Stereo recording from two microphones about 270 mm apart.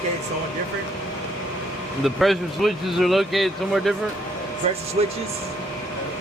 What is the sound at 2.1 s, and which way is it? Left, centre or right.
Speech, centre.